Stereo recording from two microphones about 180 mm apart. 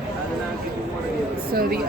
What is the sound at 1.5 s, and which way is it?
Speech, 55° right (ahead or behind).